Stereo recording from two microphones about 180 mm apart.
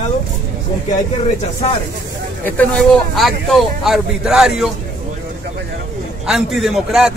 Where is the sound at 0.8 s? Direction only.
40° left (ahead or behind).